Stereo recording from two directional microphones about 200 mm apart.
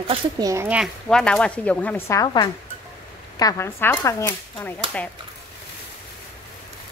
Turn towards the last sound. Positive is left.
turn(degrees=10)  # may be behind; listen again after turning